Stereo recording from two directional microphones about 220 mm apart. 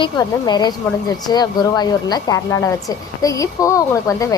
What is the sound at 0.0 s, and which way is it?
Speech, 20° left (ahead or behind).